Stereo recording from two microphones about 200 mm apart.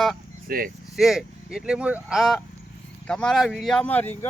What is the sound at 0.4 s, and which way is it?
Speech, 45° right (ahead or behind).